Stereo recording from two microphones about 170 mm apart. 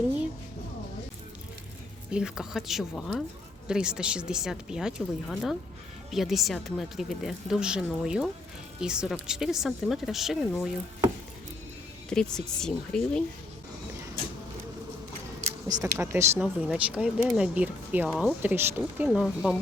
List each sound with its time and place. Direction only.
2.0 s a woman's voice: 5° right (ahead or behind)
12.1 s a woman's voice: 5° left (ahead or behind)
15.6 s speech: 20° right (ahead or behind)
18.9 s a woman's voice: 5° right (ahead or behind)